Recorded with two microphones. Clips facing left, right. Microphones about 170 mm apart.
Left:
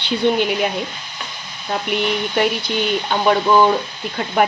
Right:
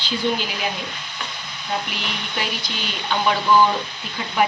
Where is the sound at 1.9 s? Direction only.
60° left (ahead or behind).